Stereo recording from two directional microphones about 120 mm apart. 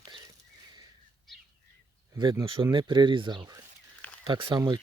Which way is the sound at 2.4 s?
45° right (ahead or behind).